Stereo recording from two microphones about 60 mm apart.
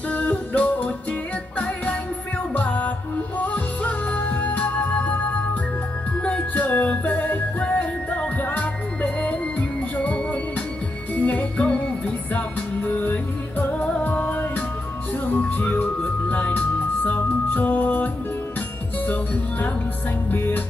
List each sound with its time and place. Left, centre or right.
0.1 s music: left
2.5 s music: left
20.2 s music: left